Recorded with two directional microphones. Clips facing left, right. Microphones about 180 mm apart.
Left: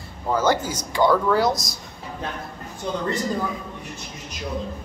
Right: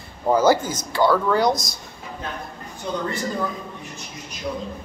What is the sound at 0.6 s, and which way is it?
Speech, 15° left (ahead or behind).